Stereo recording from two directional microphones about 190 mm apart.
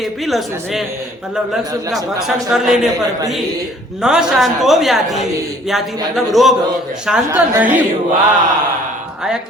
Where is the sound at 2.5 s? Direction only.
Centre (ahead or behind).